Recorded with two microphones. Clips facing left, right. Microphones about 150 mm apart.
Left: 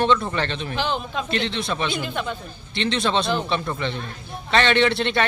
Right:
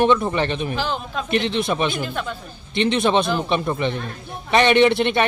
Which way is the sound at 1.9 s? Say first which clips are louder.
Right 1 dB; centre (ahead or behind).